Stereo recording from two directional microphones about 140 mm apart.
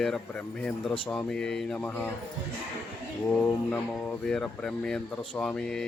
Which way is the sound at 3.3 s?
10° left (ahead or behind).